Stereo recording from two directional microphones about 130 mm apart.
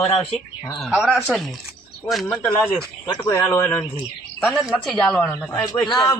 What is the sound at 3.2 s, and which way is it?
Speech, 20° left (ahead or behind).